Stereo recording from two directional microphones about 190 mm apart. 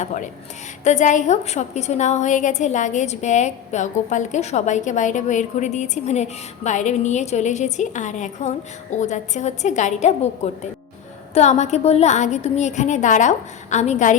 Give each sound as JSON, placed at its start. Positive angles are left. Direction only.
{"t": 0.0, "sound": "a woman's voice", "side_deg": 40}